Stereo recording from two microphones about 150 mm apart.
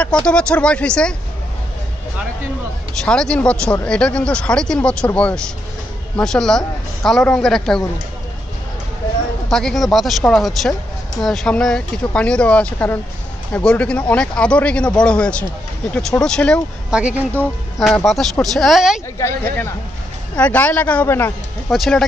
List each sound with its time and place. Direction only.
0.0 s speech: 5° left (ahead or behind)
3.0 s a woman's voice: 5° left (ahead or behind)
9.5 s a woman's voice: 5° left (ahead or behind)
16.9 s speech: 10° right (ahead or behind)
17.7 s a woman's voice: centre (ahead or behind)
19.1 s speech: 15° left (ahead or behind)
21.6 s a woman's voice: centre (ahead or behind)